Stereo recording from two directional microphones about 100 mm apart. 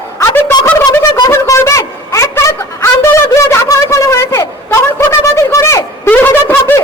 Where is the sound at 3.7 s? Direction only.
30° left (ahead or behind).